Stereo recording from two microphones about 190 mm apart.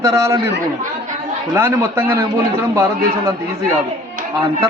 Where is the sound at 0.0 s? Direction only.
15° right (ahead or behind).